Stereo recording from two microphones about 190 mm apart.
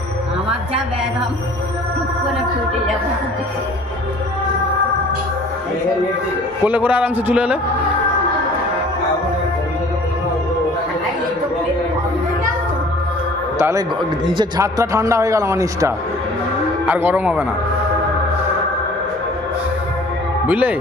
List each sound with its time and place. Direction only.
6.6 s speech: 10° right (ahead or behind)
13.6 s speech: 15° right (ahead or behind)
20.4 s a man's voice: 10° right (ahead or behind)